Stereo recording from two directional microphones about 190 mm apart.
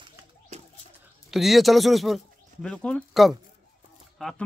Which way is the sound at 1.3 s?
Centre (ahead or behind).